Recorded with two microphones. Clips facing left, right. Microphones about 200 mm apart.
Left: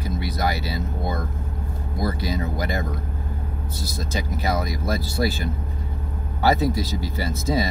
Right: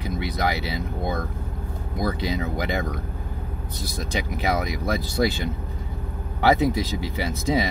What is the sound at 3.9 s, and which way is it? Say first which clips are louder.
Speech: even; 15° right (ahead or behind).